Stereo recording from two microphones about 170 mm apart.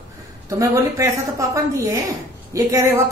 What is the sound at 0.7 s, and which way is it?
A woman's voice, 20° right (ahead or behind).